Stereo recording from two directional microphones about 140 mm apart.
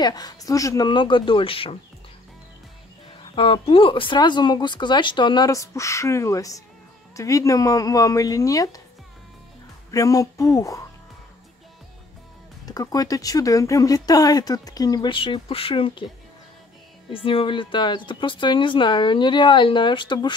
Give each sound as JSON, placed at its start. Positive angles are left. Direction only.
{"t": 0.0, "sound": "speech", "side_deg": 30}
{"t": 3.3, "sound": "speech", "side_deg": 40}
{"t": 9.8, "sound": "speech", "side_deg": 25}
{"t": 12.6, "sound": "speech", "side_deg": 25}
{"t": 17.1, "sound": "speech", "side_deg": 40}